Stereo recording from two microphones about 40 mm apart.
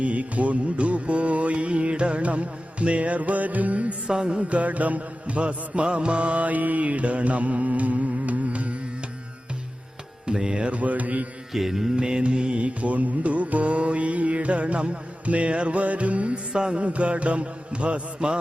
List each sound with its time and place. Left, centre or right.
0.0 s music: right
4.0 s mantra: right
4.4 s music: right
10.2 s music: right
11.5 s mantra: centre
11.9 s music: right
16.5 s mantra: right